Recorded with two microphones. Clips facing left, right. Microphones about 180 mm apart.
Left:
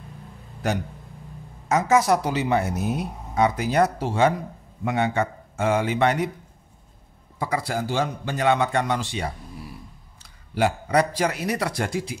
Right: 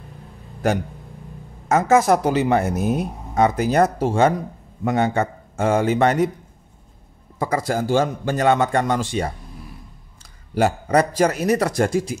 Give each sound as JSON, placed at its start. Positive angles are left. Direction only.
{"t": 1.7, "sound": "speech", "side_deg": -50}
{"t": 7.3, "sound": "speech", "side_deg": -45}
{"t": 10.5, "sound": "speech", "side_deg": -45}